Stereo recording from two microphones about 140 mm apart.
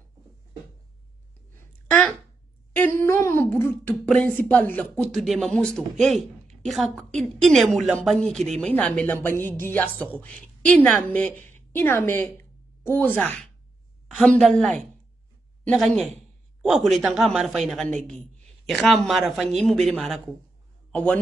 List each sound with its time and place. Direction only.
1.6 s a sound: 15° left (ahead or behind)
2.7 s humming: 15° left (ahead or behind)
4.4 s a woman's voice: 15° left (ahead or behind)